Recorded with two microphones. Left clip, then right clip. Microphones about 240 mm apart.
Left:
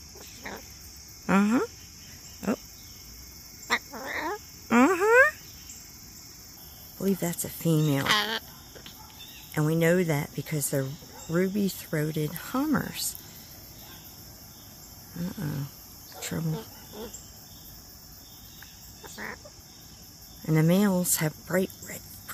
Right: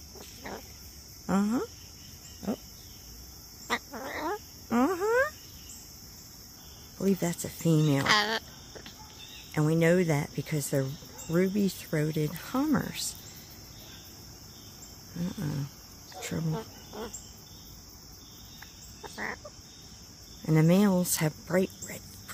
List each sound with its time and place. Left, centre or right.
1.2 s speech: left
3.6 s frog: centre
4.6 s a sound: left
7.0 s speech: centre
8.0 s speech: centre
9.5 s speech: centre
15.1 s speech: centre
16.2 s cricket: centre
19.0 s chicken: centre
20.4 s speech: centre